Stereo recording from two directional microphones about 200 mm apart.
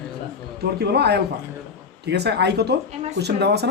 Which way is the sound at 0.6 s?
55° right (ahead or behind).